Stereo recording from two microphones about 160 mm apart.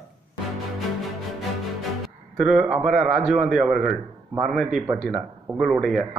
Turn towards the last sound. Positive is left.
turn(degrees=0)  # may be behind; listen again after turning